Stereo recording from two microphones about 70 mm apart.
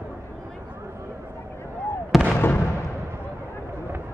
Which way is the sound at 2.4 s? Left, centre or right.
Left.